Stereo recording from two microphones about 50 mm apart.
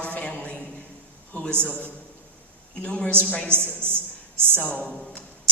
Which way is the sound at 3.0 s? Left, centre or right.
Left.